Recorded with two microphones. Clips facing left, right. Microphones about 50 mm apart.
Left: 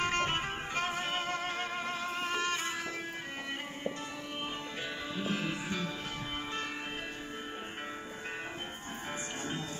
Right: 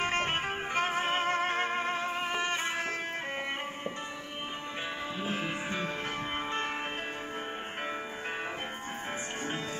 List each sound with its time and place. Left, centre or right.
0.0 s music: right
5.2 s music: right
6.3 s music: right